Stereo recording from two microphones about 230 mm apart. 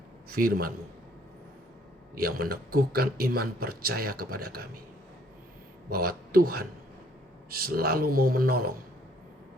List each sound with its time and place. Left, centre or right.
0.3 s a man's voice: right
2.1 s speech: right
5.9 s speech: right